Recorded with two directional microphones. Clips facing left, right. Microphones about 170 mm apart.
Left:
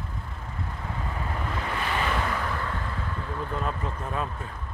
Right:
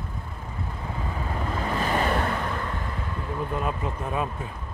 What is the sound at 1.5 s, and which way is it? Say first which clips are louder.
Vehicle: right 5 dB; 40° right (ahead or behind).